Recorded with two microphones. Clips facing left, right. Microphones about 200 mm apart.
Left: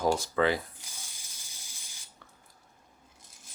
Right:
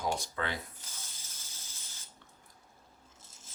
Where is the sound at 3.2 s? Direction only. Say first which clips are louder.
Even; 15° left (ahead or behind).